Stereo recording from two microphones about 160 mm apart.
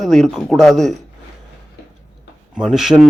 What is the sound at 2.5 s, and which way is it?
Speech, centre (ahead or behind).